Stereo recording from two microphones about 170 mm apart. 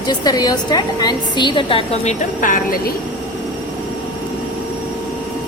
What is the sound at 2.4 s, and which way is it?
Speech, 55° left (ahead or behind).